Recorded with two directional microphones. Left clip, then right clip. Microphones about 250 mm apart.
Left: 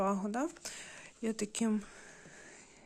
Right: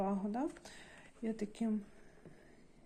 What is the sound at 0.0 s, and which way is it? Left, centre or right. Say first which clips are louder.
Speech: left 4 dB; left.